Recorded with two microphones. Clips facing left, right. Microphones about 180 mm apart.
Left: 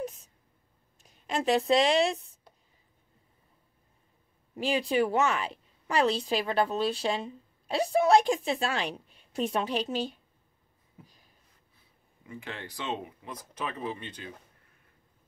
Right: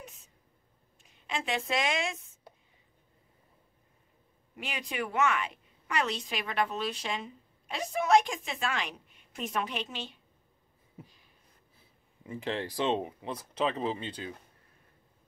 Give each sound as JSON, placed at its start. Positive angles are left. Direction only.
{"t": 1.0, "sound": "a woman's voice", "side_deg": 40}
{"t": 4.6, "sound": "a woman's voice", "side_deg": 30}
{"t": 12.3, "sound": "speech", "side_deg": -30}